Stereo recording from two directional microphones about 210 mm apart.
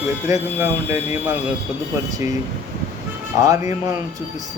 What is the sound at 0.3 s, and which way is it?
Speech, 15° right (ahead or behind).